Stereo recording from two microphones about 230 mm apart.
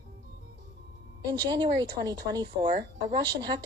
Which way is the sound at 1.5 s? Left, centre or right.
Centre.